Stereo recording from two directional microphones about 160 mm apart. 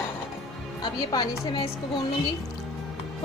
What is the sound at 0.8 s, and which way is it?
Speech, 25° left (ahead or behind).